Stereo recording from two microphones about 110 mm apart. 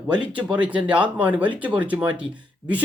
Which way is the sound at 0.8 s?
45° right (ahead or behind).